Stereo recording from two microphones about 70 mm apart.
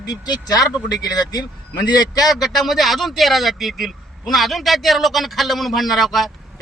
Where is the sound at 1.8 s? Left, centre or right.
Left.